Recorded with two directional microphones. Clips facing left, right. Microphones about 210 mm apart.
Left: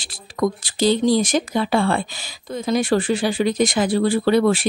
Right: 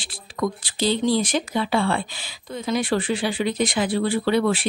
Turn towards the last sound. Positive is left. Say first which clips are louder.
# left 4 dB
turn(degrees=45)  # may be behind; listen again after turning